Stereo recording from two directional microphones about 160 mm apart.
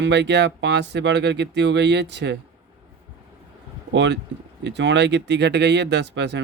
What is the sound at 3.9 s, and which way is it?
Speech, 90° right.